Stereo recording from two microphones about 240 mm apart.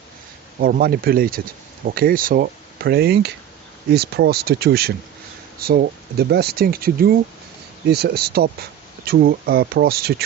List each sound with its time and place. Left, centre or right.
0.6 s speech: right